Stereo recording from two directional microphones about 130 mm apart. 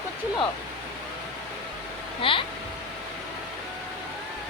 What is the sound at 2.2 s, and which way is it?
Speech, 40° left (ahead or behind).